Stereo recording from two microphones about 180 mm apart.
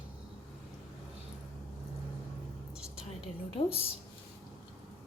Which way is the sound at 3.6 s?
30° left (ahead or behind).